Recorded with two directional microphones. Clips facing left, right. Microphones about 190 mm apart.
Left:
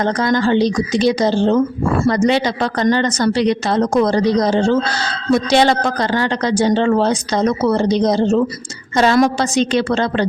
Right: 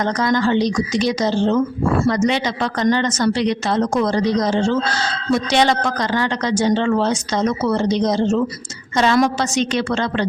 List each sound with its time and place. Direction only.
0.0 s speech: 30° left (ahead or behind)